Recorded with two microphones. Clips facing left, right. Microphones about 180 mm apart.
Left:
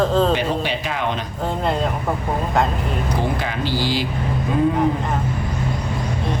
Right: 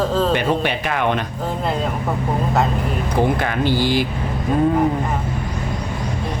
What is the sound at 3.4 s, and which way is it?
Speech, 55° right (ahead or behind).